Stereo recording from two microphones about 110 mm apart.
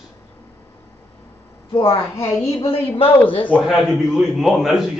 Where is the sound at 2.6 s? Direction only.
60° left (ahead or behind).